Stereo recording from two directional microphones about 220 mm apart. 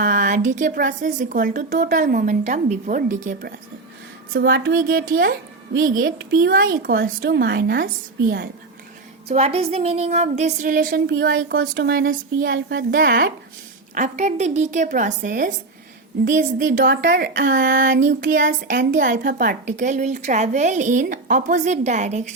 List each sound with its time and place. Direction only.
0.0 s speech: 35° right (ahead or behind)
9.3 s speech: 30° right (ahead or behind)